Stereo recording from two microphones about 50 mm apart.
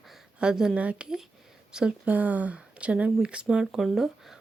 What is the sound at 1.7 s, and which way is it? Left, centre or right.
Speech, centre.